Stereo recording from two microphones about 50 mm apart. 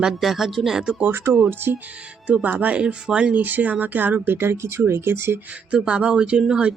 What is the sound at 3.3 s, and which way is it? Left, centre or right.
Speech, right.